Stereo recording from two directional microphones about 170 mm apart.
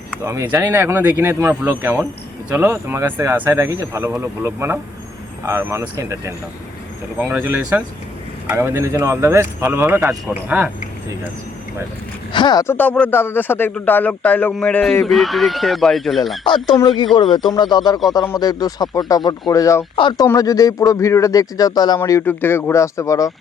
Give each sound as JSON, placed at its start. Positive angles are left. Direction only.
{"t": 0.3, "sound": "speech", "side_deg": -15}
{"t": 12.3, "sound": "speech", "side_deg": 25}
{"t": 12.7, "sound": "speech", "side_deg": 10}
{"t": 16.6, "sound": "speech", "side_deg": 25}